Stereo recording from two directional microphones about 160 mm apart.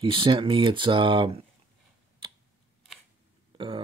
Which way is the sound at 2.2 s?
35° right (ahead or behind).